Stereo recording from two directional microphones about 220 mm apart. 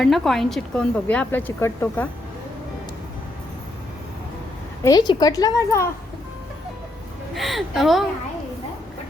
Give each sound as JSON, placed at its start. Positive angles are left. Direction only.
{"t": 0.0, "sound": "speech", "side_deg": 0}
{"t": 4.8, "sound": "speech", "side_deg": 15}
{"t": 7.3, "sound": "speech", "side_deg": 0}